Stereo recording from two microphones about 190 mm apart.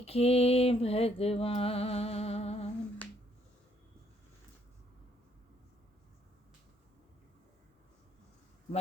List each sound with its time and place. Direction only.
0.0 s mantra: 30° left (ahead or behind)